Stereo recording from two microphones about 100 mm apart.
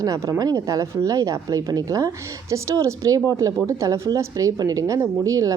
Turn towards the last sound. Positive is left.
turn(degrees=-35)  # may be behind; listen again after turning